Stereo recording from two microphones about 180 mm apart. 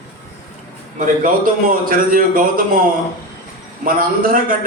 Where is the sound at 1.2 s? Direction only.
50° right (ahead or behind).